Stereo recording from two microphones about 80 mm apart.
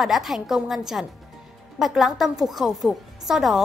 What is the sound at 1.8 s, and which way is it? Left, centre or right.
A woman's voice, centre.